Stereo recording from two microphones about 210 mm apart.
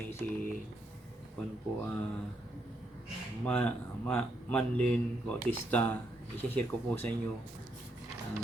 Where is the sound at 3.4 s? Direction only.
5° left (ahead or behind).